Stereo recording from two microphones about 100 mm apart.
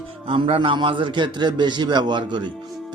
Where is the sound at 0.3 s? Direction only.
70° right (ahead or behind).